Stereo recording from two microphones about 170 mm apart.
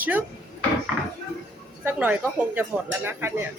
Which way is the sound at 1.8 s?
10° right (ahead or behind).